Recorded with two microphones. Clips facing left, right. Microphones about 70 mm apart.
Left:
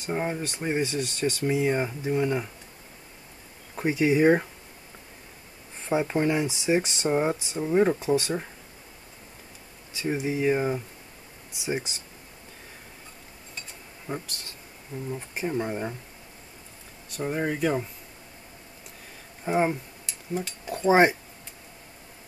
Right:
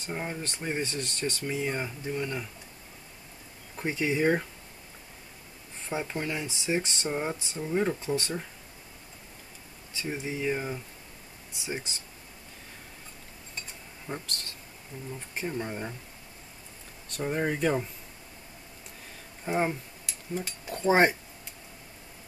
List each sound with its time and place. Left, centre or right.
0.0 s speech: centre
3.7 s speech: centre
5.9 s speech: left
9.9 s speech: centre
14.0 s speech: centre
17.1 s speech: centre
19.4 s speech: centre